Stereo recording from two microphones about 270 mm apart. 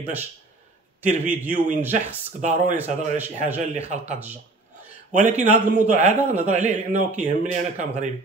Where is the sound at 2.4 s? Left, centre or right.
Right.